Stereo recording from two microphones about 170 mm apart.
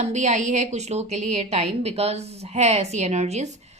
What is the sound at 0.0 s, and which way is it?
A woman's voice, 45° right (ahead or behind).